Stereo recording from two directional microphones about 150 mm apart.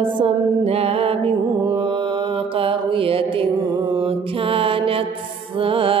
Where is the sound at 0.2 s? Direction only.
40° right (ahead or behind).